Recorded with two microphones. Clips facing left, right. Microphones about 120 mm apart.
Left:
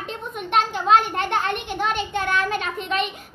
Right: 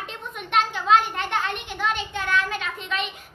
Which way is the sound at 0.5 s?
45° left (ahead or behind).